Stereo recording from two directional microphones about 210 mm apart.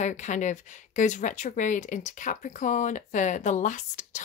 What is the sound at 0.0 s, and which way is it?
Speech, 35° left (ahead or behind).